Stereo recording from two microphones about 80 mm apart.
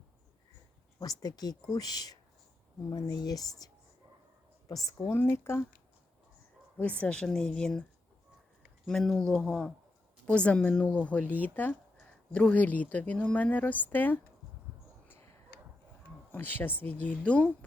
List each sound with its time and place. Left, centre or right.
0.9 s speech: left
5.1 s speech: left
6.7 s a woman's voice: centre
8.9 s a woman's voice: centre
10.2 s a woman's voice: centre
16.3 s a woman's voice: left